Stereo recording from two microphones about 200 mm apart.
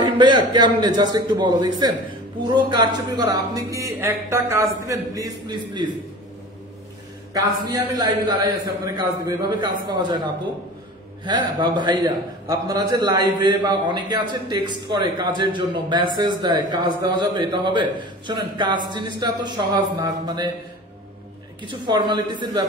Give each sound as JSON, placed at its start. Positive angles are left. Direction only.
{"t": 0.0, "sound": "a man's voice", "side_deg": -25}
{"t": 7.3, "sound": "a man's voice", "side_deg": -20}
{"t": 11.2, "sound": "a man's voice", "side_deg": -20}
{"t": 21.6, "sound": "a man's voice", "side_deg": -25}